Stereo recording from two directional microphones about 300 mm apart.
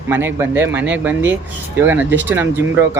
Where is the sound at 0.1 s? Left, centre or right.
Centre.